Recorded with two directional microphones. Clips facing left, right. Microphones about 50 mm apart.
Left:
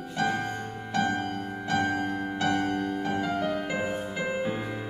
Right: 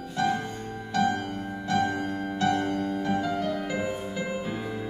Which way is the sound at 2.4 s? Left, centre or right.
Left.